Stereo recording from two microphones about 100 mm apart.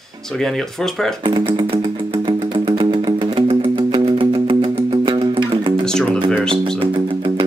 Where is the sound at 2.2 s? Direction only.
55° right (ahead or behind).